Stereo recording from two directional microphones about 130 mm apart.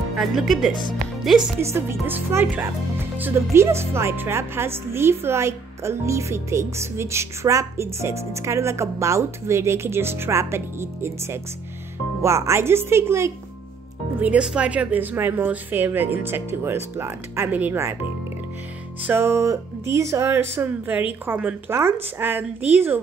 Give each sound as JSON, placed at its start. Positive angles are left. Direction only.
{"t": 0.2, "sound": "speech", "side_deg": 0}
{"t": 1.6, "sound": "a woman's voice", "side_deg": -20}
{"t": 14.2, "sound": "speech", "side_deg": -10}
{"t": 19.0, "sound": "speech", "side_deg": -20}